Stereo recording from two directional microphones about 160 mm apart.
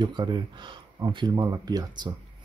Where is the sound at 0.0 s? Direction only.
30° right (ahead or behind).